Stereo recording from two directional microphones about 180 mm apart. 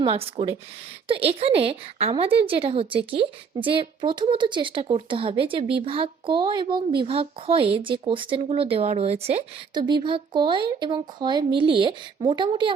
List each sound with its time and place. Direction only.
0.0 s a woman's voice: 30° right (ahead or behind)
9.7 s a woman's voice: 25° right (ahead or behind)